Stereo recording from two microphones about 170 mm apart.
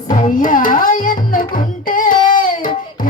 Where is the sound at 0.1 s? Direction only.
50° left (ahead or behind).